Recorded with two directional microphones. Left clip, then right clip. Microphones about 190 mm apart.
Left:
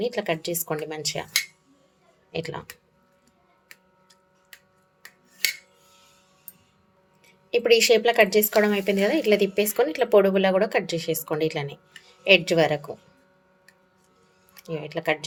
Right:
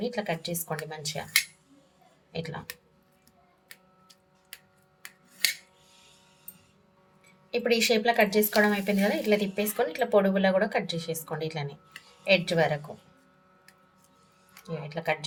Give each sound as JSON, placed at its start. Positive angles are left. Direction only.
{"t": 0.0, "sound": "a woman's voice", "side_deg": 50}
{"t": 2.3, "sound": "a woman's voice", "side_deg": 50}
{"t": 7.5, "sound": "a woman's voice", "side_deg": 45}
{"t": 14.7, "sound": "a woman's voice", "side_deg": 50}